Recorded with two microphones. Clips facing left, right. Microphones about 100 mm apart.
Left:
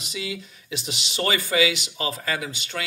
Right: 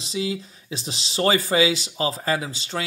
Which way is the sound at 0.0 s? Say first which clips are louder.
Right 5 dB; 30° right (ahead or behind).